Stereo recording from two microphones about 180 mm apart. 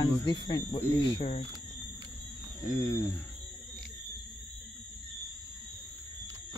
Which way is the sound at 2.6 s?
15° left (ahead or behind).